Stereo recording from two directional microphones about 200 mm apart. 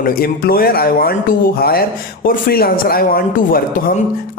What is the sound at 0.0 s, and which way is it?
Speech, 50° left (ahead or behind).